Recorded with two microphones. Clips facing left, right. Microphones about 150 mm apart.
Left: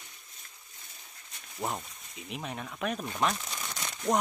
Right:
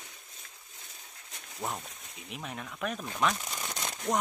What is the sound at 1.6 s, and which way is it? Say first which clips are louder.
Speech: left 2 dB; 15° left (ahead or behind).